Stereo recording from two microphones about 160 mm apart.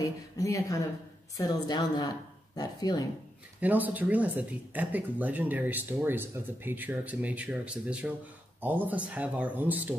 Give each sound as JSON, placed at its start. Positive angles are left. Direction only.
{"t": 0.0, "sound": "speech", "side_deg": 20}
{"t": 3.6, "sound": "speech", "side_deg": -10}